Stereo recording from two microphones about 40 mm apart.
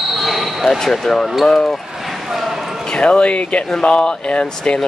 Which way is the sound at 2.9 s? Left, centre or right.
Left.